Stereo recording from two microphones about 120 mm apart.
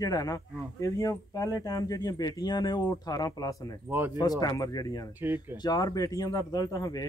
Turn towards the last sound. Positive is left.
turn(degrees=30)  # may be behind; listen again after turning